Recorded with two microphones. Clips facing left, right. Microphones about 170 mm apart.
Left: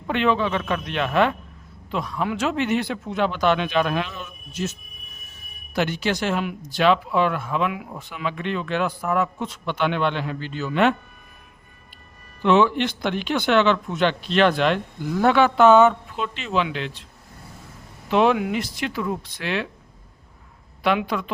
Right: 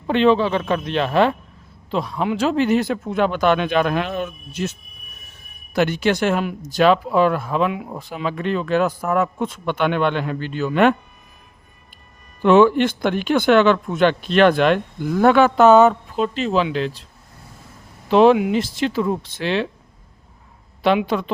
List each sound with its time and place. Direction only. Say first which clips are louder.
0.1 s speech: right 5 dB; 30° right (ahead or behind); by 4.7 s 60° right (ahead or behind)
5.7 s speech: right 5 dB; 50° right (ahead or behind)
12.4 s speech: right 5 dB; 50° right (ahead or behind)
18.1 s speech: right 6 dB; 35° right (ahead or behind)
20.8 s speech: right 4 dB; 30° right (ahead or behind)